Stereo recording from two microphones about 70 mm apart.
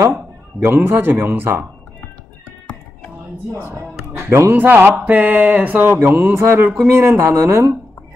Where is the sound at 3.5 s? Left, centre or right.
Right.